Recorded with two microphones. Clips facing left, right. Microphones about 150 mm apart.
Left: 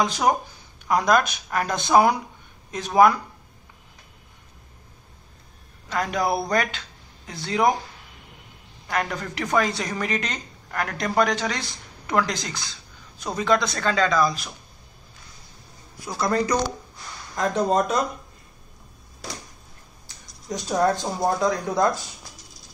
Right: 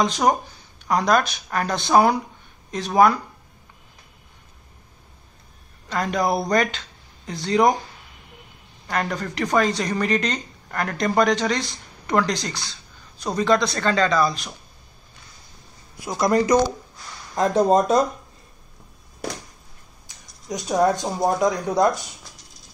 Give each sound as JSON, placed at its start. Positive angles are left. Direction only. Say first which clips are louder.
{"t": 0.0, "sound": "speech", "louder": "right 2 dB", "side_deg": 5}
{"t": 5.9, "sound": "speech", "louder": "right 2 dB", "side_deg": 5}
{"t": 8.8, "sound": "speech", "louder": "right 1 dB", "side_deg": 5}
{"t": 16.1, "sound": "speech", "louder": "right 5 dB", "side_deg": -20}
{"t": 17.4, "sound": "speech", "louder": "right 4 dB", "side_deg": -35}
{"t": 20.4, "sound": "speech", "louder": "right 2 dB", "side_deg": -15}